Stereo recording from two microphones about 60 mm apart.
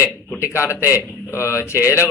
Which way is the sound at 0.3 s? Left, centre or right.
Left.